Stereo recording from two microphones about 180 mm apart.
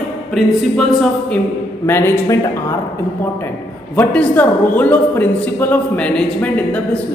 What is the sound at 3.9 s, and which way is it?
Speech, 10° left (ahead or behind).